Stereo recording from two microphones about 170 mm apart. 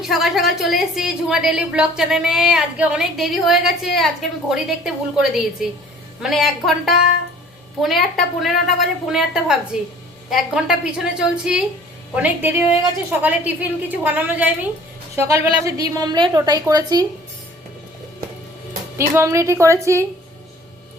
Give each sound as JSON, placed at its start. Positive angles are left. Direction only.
{"t": 0.0, "sound": "a woman's voice", "side_deg": 0}
{"t": 19.1, "sound": "a woman's voice", "side_deg": -15}